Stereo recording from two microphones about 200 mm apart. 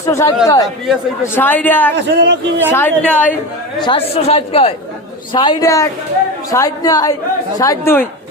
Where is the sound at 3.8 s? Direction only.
30° left (ahead or behind).